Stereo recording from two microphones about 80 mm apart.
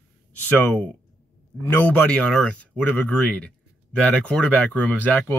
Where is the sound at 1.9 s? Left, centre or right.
Centre.